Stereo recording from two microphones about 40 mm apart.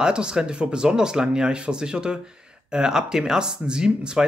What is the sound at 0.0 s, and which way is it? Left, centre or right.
Speech, right.